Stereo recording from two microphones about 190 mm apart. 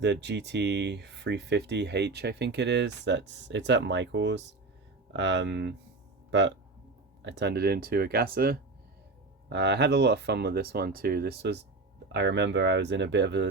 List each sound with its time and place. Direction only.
0.0 s speech: 65° right (ahead or behind)
7.3 s speech: 65° right (ahead or behind)
9.5 s speech: 65° right (ahead or behind)